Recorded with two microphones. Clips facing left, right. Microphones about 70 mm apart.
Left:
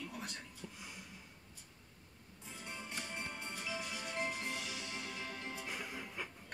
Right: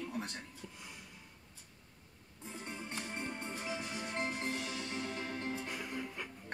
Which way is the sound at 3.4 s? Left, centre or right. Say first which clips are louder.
Right 3 dB; right.